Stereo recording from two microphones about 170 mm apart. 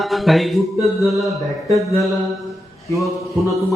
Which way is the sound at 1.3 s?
20° right (ahead or behind).